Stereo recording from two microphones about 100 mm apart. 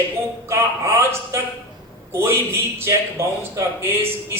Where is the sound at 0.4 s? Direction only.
25° right (ahead or behind).